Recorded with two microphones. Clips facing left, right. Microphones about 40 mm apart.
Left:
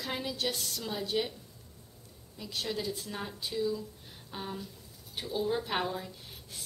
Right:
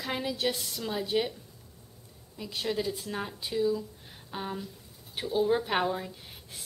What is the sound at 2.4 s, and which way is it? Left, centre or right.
A woman's voice, centre.